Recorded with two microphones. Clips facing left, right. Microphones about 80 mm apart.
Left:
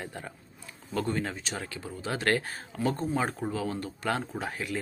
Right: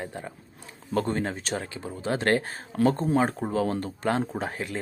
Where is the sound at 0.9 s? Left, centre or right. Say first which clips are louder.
Right 4 dB; right.